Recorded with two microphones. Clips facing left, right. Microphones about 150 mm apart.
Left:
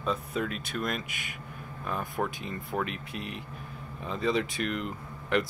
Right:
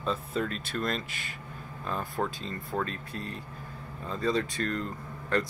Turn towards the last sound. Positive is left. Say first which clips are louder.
# left 1 dB
turn(degrees=20)  # may be behind; listen again after turning